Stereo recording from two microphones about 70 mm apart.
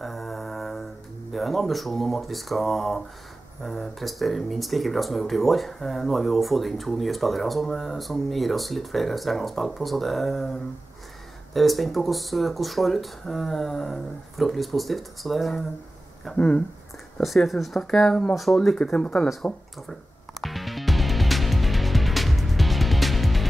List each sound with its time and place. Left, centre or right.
0.0 s music: centre
1.3 s speech: centre
11.5 s speech: centre
16.3 s speech: centre
17.2 s speech: centre
18.8 s speech: centre
19.4 s music: centre